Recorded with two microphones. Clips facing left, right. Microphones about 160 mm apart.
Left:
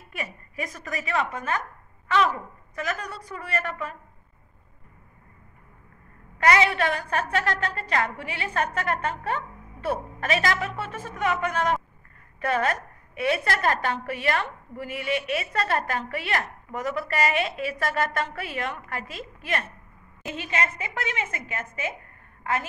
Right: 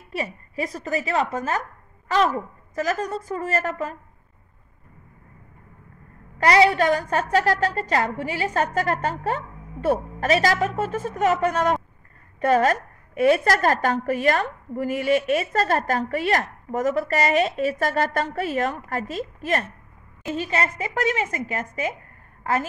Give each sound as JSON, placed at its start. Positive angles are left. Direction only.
{"t": 0.1, "sound": "a woman's voice", "side_deg": -30}
{"t": 6.4, "sound": "a woman's voice", "side_deg": -35}